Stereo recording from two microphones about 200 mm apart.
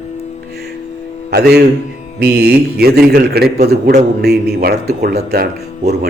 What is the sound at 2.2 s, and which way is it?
A man's voice, 55° right (ahead or behind).